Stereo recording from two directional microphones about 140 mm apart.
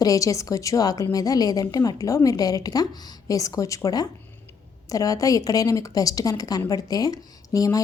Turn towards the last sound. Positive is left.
turn(degrees=25)  # may be behind; listen again after turning